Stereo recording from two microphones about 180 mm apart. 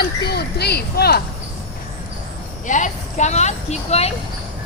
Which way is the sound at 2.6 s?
45° left (ahead or behind).